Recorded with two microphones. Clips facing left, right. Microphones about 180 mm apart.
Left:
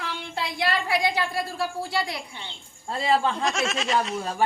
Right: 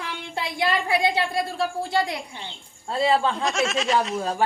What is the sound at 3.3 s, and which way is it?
Speech, centre (ahead or behind).